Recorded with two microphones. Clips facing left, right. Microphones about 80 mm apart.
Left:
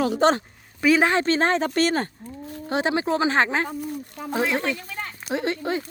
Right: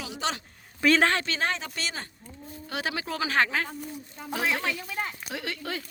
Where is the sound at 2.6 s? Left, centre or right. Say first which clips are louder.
Left 9 dB; left.